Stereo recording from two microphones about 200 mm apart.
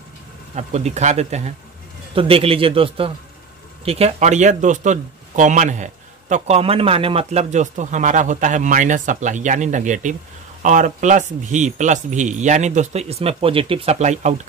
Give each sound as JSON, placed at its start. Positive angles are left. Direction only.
{"t": 0.6, "sound": "a man's voice", "side_deg": -35}